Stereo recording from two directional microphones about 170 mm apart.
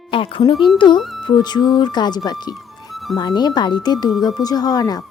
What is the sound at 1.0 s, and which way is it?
Music, centre (ahead or behind).